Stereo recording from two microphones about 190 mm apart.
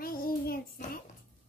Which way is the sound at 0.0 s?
50° left (ahead or behind).